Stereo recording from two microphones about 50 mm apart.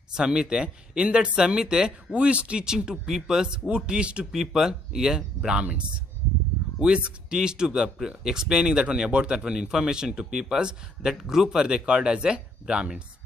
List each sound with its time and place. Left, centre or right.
0.1 s speech: centre